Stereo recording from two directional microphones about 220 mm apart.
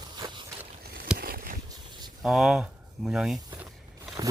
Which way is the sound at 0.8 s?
45° right (ahead or behind).